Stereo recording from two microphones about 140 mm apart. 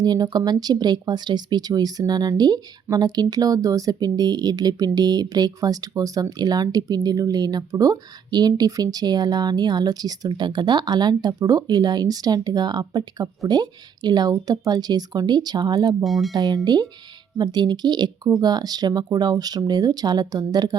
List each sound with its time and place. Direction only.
0.0 s speech: 30° right (ahead or behind)
16.0 s speech: centre (ahead or behind)
16.3 s speech: 25° right (ahead or behind)